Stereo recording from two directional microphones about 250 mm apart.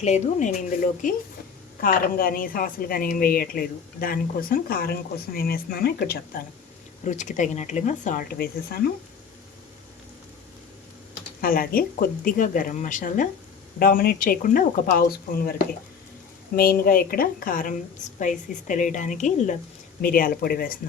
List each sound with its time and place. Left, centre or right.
0.0 s a woman's voice: left
11.3 s a woman's voice: left